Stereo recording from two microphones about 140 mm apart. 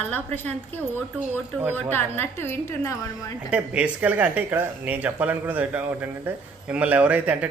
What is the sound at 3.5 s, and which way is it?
Speech, 10° right (ahead or behind).